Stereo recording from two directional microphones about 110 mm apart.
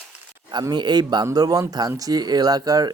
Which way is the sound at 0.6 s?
40° right (ahead or behind).